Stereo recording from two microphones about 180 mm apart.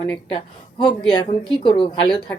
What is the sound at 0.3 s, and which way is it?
A woman's voice, 25° left (ahead or behind).